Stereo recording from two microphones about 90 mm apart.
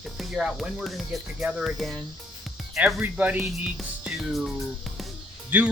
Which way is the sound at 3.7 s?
5° right (ahead or behind).